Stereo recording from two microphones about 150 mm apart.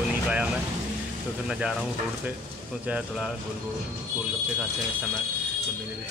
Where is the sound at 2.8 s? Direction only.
5° right (ahead or behind).